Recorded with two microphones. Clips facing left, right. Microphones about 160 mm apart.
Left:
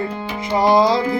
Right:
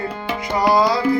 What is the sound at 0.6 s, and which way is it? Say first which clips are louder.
Music: left 2 dB; 25° left (ahead or behind).